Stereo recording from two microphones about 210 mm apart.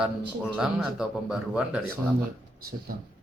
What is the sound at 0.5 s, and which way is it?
A man's voice, 5° right (ahead or behind).